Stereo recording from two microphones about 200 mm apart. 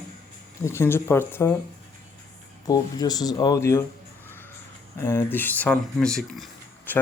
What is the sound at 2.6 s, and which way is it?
Speech, 20° left (ahead or behind).